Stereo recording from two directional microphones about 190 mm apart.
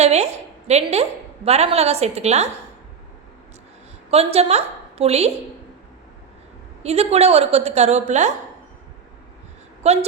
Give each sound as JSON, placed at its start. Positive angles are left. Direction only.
{"t": 0.0, "sound": "a woman's voice", "side_deg": -35}
{"t": 4.1, "sound": "a woman's voice", "side_deg": -30}
{"t": 6.8, "sound": "a woman's voice", "side_deg": -35}
{"t": 9.8, "sound": "a woman's voice", "side_deg": -35}